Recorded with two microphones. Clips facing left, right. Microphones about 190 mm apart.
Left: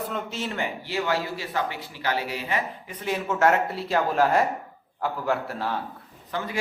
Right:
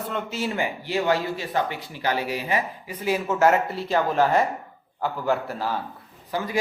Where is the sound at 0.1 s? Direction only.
5° right (ahead or behind).